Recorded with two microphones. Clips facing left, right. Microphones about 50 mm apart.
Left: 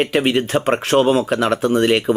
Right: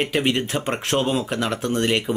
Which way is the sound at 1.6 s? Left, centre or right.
Centre.